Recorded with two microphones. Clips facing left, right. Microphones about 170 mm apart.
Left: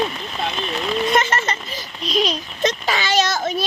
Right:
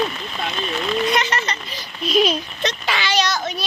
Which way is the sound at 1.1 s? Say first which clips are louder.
Left 2 dB; 50° left (ahead or behind).